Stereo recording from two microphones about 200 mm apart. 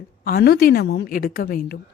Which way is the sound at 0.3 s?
50° left (ahead or behind).